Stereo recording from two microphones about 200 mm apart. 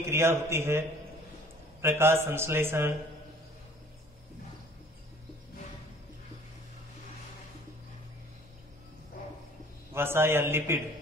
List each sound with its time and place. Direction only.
0.0 s a man's voice: 15° right (ahead or behind)
9.9 s a man's voice: 10° right (ahead or behind)